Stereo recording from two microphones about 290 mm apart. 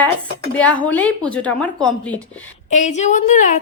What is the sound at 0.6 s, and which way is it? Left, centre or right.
A woman's voice, centre.